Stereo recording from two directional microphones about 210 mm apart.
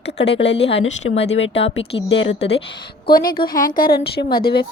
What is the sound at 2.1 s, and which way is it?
Speech, 60° left (ahead or behind).